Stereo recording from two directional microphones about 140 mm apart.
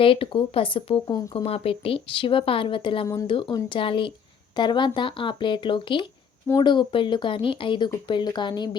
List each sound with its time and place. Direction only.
0.0 s a woman's voice: 40° left (ahead or behind)